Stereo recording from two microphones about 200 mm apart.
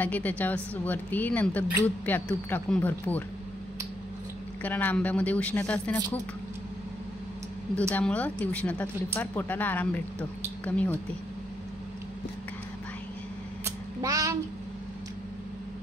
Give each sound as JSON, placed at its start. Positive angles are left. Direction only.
{"t": 0.0, "sound": "speech", "side_deg": 10}
{"t": 4.6, "sound": "speech", "side_deg": 10}
{"t": 7.9, "sound": "speech", "side_deg": 5}
{"t": 13.7, "sound": "a sound", "side_deg": -15}